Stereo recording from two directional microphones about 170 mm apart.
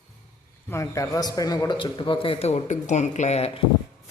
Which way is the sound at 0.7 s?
15° left (ahead or behind).